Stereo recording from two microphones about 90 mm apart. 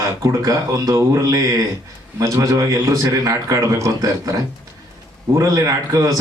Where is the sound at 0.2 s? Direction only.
35° right (ahead or behind).